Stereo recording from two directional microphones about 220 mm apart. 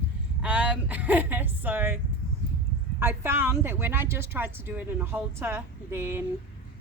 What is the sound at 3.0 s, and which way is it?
A woman's voice, 10° right (ahead or behind).